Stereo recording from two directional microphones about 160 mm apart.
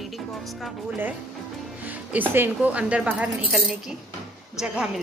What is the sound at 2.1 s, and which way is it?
A woman's voice, 10° right (ahead or behind).